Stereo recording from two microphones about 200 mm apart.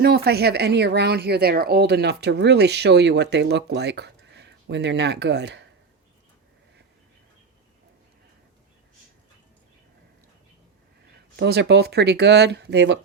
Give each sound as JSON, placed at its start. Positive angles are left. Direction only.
{"t": 0.0, "sound": "speech", "side_deg": -55}
{"t": 11.3, "sound": "speech", "side_deg": -55}